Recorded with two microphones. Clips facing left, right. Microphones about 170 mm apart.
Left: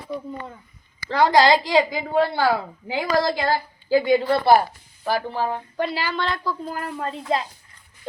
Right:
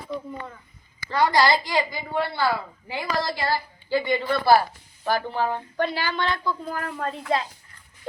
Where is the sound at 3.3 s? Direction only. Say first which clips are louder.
Left 4 dB; 50° left (ahead or behind).